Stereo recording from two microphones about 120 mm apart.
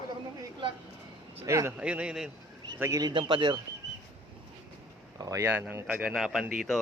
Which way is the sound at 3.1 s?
40° right (ahead or behind).